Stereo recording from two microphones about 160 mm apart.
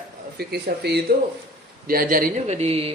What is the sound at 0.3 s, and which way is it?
Speech, 85° right.